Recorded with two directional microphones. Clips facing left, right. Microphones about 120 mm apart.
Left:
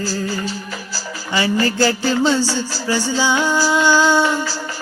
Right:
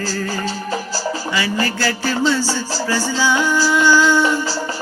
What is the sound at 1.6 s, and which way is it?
Music, 30° left (ahead or behind).